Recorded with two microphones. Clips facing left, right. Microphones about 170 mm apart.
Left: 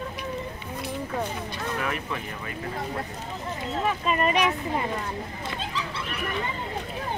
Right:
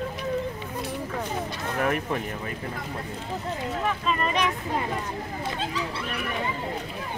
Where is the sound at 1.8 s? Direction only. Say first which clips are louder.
Right 7 dB; 50° right (ahead or behind).